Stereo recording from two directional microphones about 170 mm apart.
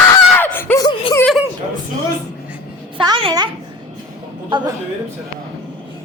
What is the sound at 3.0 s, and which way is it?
Speech, 30° right (ahead or behind).